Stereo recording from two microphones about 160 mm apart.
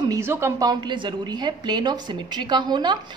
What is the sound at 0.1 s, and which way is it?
A woman's voice, 15° right (ahead or behind).